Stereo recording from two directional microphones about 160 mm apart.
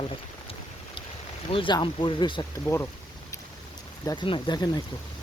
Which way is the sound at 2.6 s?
15° left (ahead or behind).